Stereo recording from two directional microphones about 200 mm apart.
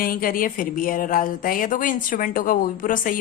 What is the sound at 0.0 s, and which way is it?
A woman's voice, 45° left (ahead or behind).